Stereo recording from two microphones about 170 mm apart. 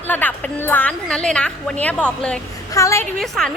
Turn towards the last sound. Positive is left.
turn(degrees=5)  # may be behind; listen again after turning